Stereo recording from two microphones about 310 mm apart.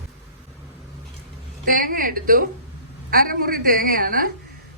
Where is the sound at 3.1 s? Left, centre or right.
Right.